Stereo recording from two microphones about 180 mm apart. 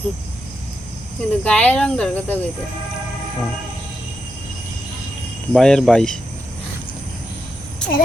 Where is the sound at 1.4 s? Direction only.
5° left (ahead or behind).